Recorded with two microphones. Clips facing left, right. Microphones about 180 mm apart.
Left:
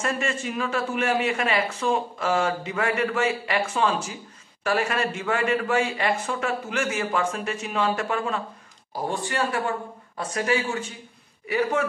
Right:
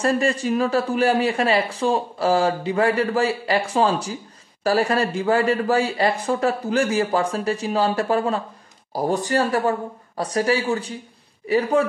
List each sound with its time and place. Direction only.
0.0 s speech: 35° right (ahead or behind)